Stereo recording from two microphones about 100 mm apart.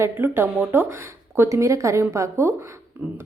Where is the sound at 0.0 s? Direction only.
20° right (ahead or behind).